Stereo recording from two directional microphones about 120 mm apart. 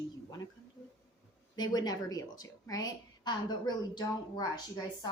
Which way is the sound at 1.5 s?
35° left (ahead or behind).